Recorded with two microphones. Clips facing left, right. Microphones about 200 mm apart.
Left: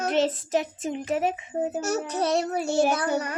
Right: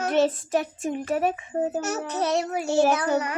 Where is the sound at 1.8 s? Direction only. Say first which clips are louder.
Left 1 dB; 30° left (ahead or behind).